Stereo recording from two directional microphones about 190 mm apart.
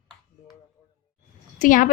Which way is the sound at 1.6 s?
45° left (ahead or behind).